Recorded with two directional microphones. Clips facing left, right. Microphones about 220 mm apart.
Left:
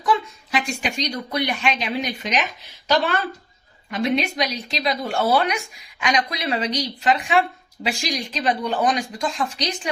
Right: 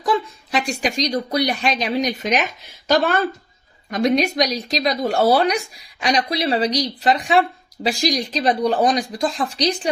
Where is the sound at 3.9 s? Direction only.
40° right (ahead or behind).